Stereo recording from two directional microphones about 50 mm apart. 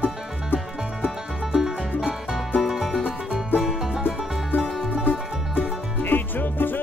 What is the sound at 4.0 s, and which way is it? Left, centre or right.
Music, left.